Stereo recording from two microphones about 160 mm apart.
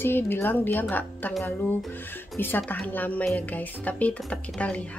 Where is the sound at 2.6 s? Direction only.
10° left (ahead or behind).